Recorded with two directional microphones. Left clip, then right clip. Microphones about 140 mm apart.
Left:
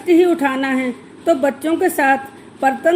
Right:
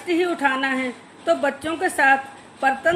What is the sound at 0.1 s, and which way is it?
A woman's voice, 50° left (ahead or behind).